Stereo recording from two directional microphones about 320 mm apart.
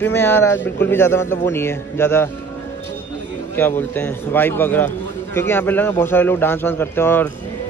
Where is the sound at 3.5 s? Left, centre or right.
Centre.